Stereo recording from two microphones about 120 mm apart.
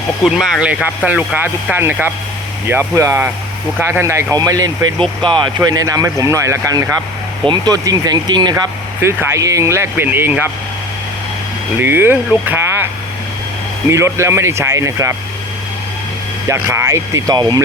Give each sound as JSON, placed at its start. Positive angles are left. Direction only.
{"t": 0.3, "sound": "speech", "side_deg": 0}
{"t": 1.0, "sound": "speech", "side_deg": -15}
{"t": 7.4, "sound": "speech", "side_deg": -35}
{"t": 9.3, "sound": "speech", "side_deg": -25}
{"t": 11.8, "sound": "speech", "side_deg": -20}
{"t": 13.9, "sound": "speech", "side_deg": -25}
{"t": 16.5, "sound": "speech", "side_deg": -25}